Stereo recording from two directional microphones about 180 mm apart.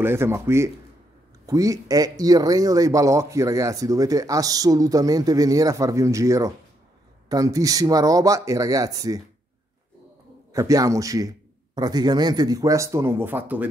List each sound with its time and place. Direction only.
0.0 s speech: 15° right (ahead or behind)
10.5 s speech: 20° right (ahead or behind)